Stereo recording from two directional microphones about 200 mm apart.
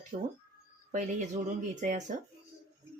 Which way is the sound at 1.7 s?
40° right (ahead or behind).